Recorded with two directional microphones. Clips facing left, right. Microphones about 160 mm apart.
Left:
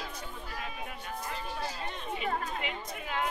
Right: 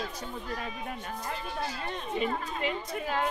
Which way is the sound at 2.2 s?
40° right (ahead or behind).